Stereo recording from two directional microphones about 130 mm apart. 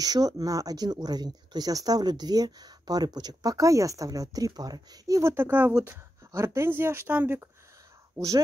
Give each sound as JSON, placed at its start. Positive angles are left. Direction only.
{"t": 0.0, "sound": "speech", "side_deg": -30}